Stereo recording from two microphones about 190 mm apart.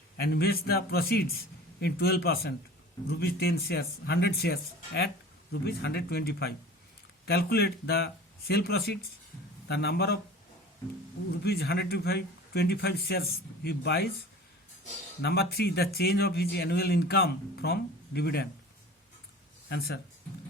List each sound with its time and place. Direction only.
0.2 s a man's voice: 55° left (ahead or behind)
11.4 s a man's voice: 55° left (ahead or behind)
15.2 s a man's voice: 55° left (ahead or behind)
19.6 s speech: 60° left (ahead or behind)